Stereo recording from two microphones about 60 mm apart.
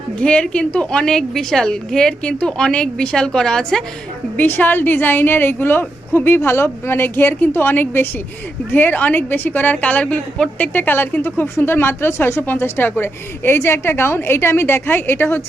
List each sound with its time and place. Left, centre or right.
0.2 s a woman's voice: left
4.4 s a woman's voice: left
10.8 s speech: left